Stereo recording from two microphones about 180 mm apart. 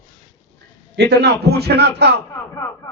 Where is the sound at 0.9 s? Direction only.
65° right (ahead or behind).